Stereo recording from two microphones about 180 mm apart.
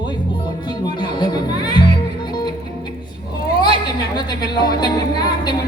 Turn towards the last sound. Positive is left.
turn(degrees=25)  # may be behind; listen again after turning